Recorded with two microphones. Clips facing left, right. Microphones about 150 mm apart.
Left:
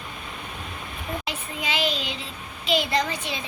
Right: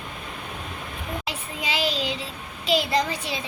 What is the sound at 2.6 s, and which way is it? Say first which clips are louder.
Speech: right 1 dB; 35° right (ahead or behind).